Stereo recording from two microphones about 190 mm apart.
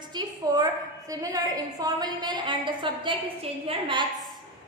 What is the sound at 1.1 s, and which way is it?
A woman's voice, 20° right (ahead or behind).